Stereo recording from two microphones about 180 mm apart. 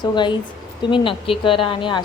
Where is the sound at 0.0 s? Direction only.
25° left (ahead or behind).